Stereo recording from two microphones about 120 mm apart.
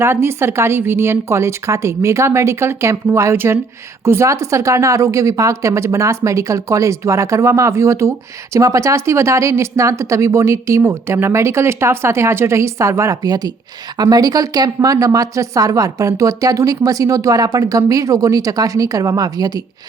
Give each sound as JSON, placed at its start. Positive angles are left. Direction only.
{"t": 0.0, "sound": "speech", "side_deg": -20}